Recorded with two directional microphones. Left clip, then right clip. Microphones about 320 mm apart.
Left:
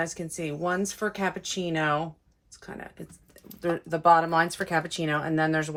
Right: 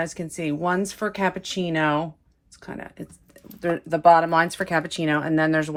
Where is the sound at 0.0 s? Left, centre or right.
Right.